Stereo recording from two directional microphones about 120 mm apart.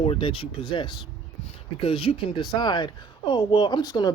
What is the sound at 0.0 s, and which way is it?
Speech, 50° left (ahead or behind).